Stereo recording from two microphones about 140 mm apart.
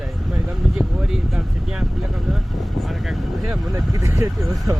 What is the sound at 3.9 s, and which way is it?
Speech, 20° right (ahead or behind).